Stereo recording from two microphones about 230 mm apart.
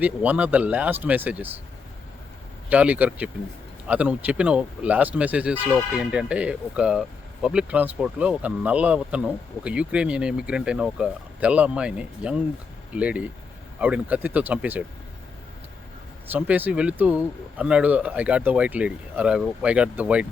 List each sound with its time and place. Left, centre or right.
0.0 s speech: centre
2.6 s speech: centre
16.2 s speech: centre